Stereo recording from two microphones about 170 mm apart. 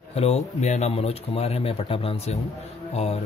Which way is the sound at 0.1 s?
40° left (ahead or behind).